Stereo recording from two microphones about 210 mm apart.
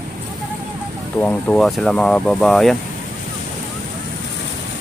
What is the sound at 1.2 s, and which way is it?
Speech, 5° left (ahead or behind).